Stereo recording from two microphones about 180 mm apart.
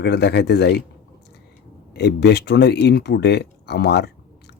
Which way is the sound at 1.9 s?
65° left (ahead or behind).